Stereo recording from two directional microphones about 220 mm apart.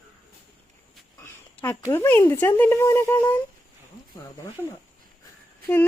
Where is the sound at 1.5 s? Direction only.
10° left (ahead or behind).